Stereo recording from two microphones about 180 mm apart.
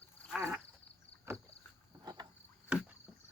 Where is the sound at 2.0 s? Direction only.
20° right (ahead or behind).